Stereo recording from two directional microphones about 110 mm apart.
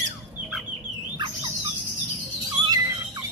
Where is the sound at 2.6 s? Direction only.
35° right (ahead or behind).